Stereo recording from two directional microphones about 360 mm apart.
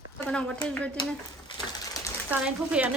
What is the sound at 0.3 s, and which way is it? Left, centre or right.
Speech, centre.